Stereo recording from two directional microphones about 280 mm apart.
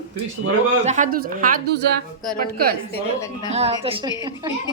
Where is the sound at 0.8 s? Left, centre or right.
Right.